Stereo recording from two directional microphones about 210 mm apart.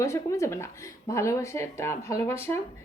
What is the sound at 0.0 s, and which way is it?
Speech, 15° left (ahead or behind).